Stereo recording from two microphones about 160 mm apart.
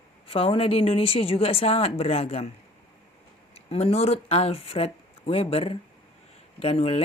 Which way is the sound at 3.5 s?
40° left (ahead or behind).